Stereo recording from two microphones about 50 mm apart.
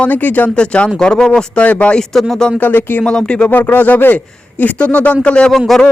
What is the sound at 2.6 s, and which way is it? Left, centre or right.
Speech, left.